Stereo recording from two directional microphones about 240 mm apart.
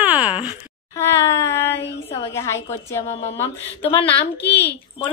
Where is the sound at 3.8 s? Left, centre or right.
Left.